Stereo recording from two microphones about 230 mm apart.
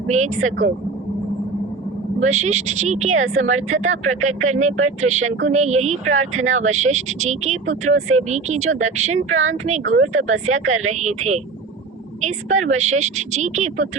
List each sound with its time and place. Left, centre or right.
2.2 s speech: right
9.3 s speech: right
9.6 s speech: right